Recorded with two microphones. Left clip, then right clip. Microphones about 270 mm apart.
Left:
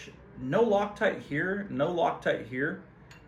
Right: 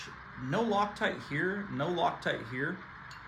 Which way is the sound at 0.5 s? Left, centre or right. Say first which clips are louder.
Left 5 dB; centre.